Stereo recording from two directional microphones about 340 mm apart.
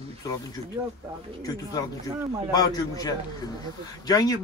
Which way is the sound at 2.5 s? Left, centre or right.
Centre.